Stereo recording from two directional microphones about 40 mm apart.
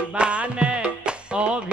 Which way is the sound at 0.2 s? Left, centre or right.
Right.